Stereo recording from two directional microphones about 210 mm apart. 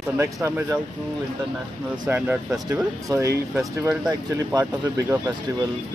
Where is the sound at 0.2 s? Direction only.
15° right (ahead or behind).